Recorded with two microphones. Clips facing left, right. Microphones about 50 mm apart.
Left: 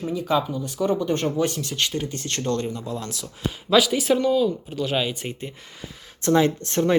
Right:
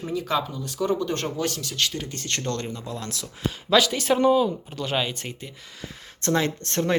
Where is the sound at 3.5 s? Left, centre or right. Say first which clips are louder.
Left 2 dB; centre.